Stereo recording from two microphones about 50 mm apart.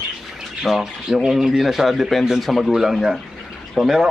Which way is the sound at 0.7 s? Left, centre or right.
Centre.